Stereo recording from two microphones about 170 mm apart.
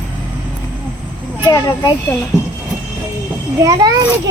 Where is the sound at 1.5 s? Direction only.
20° left (ahead or behind).